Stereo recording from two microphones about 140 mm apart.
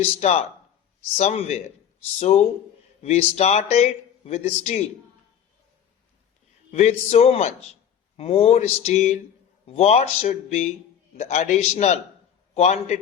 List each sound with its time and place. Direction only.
0.0 s speech: 50° left (ahead or behind)
6.7 s speech: 50° left (ahead or behind)